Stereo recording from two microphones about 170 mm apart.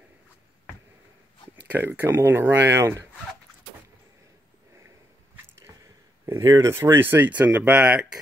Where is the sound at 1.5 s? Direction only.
10° right (ahead or behind).